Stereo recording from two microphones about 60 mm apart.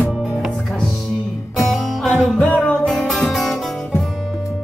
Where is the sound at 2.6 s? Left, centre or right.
Left.